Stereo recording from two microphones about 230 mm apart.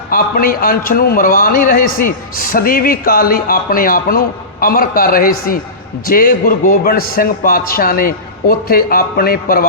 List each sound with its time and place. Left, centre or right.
0.1 s a man's voice: left